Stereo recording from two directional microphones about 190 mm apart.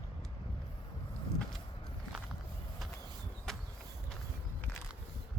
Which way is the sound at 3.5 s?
Centre (ahead or behind).